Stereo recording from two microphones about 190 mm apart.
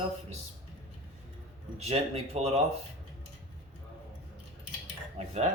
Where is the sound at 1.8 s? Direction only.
30° right (ahead or behind).